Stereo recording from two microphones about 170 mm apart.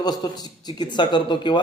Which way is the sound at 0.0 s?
25° left (ahead or behind).